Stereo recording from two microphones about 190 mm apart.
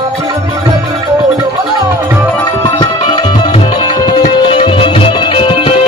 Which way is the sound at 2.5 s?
25° left (ahead or behind).